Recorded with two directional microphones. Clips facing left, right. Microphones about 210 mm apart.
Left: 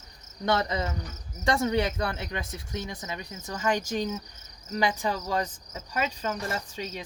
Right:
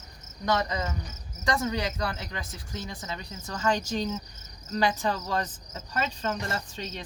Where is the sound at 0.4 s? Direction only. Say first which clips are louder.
Left 1 dB; 25° left (ahead or behind); by 4.2 s 10° left (ahead or behind).